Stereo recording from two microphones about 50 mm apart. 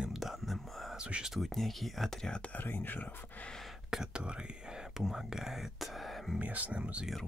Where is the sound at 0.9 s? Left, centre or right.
Right.